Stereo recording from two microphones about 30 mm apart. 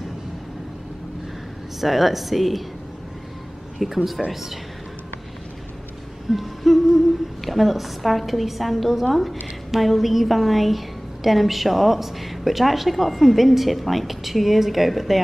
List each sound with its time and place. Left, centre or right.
1.8 s a woman's voice: centre
3.7 s a man's voice: centre
6.3 s hoot: centre
7.4 s a woman's voice: centre